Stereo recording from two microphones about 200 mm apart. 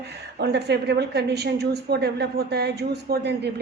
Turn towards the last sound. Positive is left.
turn(degrees=-55)  # may be behind; listen again after turning